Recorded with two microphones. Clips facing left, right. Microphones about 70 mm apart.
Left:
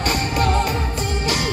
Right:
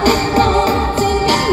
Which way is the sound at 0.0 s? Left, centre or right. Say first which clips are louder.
Right 8 dB; right.